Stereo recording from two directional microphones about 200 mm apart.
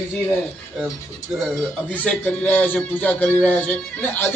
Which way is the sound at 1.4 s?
Centre (ahead or behind).